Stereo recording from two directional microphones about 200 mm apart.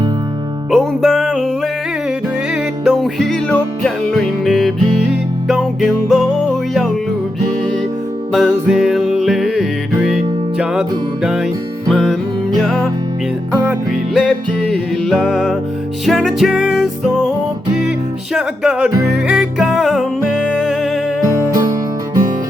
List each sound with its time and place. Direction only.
0.7 s music: centre (ahead or behind)
8.3 s music: centre (ahead or behind)
18.3 s music: centre (ahead or behind)
21.3 s music: 15° right (ahead or behind)